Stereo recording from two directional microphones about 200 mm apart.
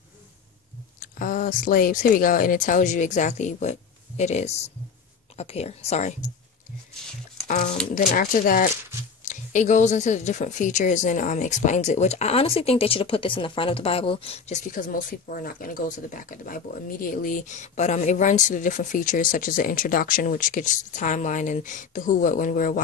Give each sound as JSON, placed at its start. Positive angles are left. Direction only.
{"t": 0.9, "sound": "speech", "side_deg": 45}
{"t": 7.4, "sound": "speech", "side_deg": 35}